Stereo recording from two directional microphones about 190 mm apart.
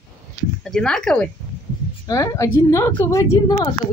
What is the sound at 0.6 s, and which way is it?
Speech, 5° left (ahead or behind).